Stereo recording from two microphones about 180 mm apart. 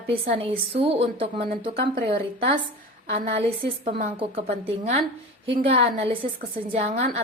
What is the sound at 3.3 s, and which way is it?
A woman's voice, 35° right (ahead or behind).